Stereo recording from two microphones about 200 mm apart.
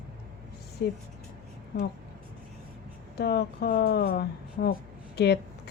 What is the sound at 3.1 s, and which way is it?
Speech, 55° left (ahead or behind).